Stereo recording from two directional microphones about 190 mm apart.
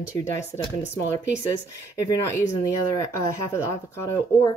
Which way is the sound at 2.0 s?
15° left (ahead or behind).